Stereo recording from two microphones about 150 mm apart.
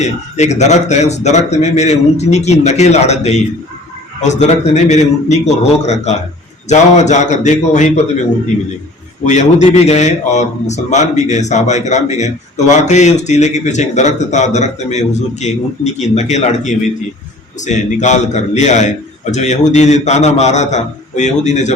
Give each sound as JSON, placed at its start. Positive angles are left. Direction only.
{"t": 0.0, "sound": "a man's voice", "side_deg": 50}
{"t": 9.2, "sound": "a man's voice", "side_deg": 50}